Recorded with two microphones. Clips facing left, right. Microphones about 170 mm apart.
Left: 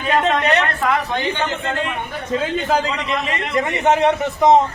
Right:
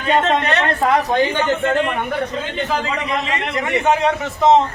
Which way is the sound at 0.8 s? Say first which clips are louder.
Right 4 dB; 35° right (ahead or behind).